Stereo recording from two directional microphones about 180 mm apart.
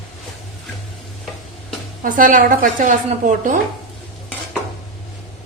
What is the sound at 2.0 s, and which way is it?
A woman's voice, 45° right (ahead or behind).